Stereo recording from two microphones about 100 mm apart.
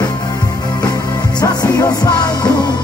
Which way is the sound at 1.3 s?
40° left (ahead or behind).